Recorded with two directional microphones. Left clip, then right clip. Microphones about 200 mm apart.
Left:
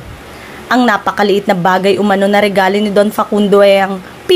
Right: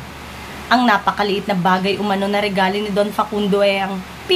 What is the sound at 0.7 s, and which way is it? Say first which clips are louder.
A woman's voice: left 3 dB; 45° left (ahead or behind).